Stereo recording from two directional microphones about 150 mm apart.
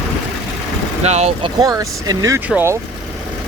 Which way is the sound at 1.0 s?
45° right (ahead or behind).